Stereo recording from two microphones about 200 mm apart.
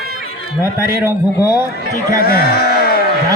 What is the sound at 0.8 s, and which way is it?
Speech, 15° right (ahead or behind).